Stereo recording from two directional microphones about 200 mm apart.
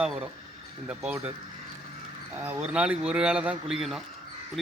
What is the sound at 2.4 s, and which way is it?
A man's voice, 10° right (ahead or behind).